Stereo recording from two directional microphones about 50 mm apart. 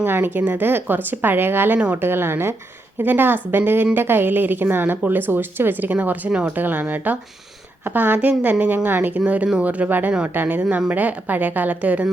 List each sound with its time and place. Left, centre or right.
0.0 s a woman's voice: right
3.0 s a woman's voice: right
9.1 s a woman's voice: right
10.6 s a woman's voice: right